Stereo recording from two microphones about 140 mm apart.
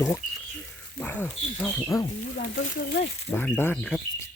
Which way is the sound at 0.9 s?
15° left (ahead or behind).